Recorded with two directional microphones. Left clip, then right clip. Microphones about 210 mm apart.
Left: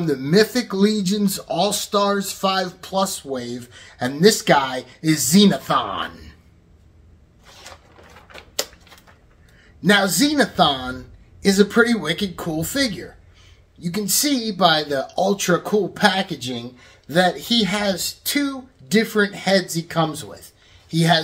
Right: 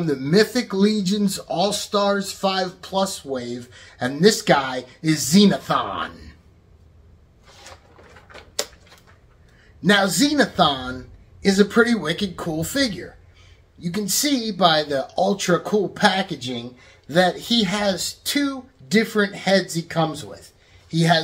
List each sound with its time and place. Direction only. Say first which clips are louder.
0.0 s speech: left 1 dB; 5° left (ahead or behind)
8.3 s a sound: left 1 dB; 15° left (ahead or behind)
9.8 s speech: left 1 dB; centre (ahead or behind)